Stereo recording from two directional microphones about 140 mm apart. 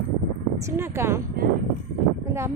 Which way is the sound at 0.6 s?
15° right (ahead or behind).